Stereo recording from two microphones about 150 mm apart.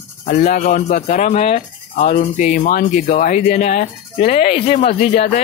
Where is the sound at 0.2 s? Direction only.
60° left (ahead or behind).